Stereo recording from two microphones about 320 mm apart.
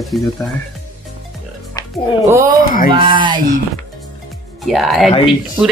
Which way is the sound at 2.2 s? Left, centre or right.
Centre.